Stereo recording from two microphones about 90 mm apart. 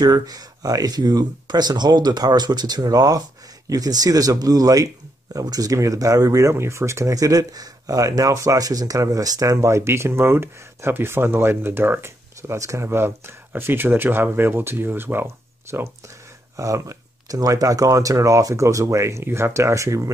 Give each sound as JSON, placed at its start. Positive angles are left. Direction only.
{"t": 0.0, "sound": "speech", "side_deg": -45}